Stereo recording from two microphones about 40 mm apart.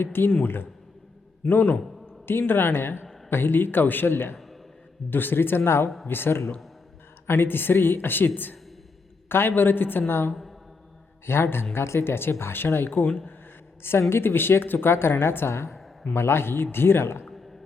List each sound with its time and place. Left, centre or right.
0.0 s speech: left
0.4 s speech: left
1.4 s a man's voice: left
2.5 s speech: left
4.1 s a man's voice: left
5.1 s a woman's voice: left
6.1 s speech: left
7.3 s speech: left
9.3 s speech: left
10.1 s speech: left
14.1 s a woman's voice: left
16.1 s a man's voice: left